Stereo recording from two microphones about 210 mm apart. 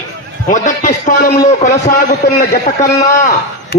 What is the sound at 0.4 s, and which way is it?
Speech, 35° left (ahead or behind).